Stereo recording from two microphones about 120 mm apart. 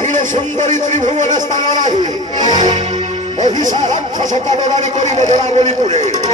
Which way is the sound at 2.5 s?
90° right.